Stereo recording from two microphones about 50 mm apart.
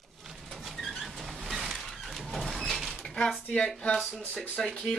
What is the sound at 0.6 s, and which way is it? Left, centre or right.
Vehicle, centre.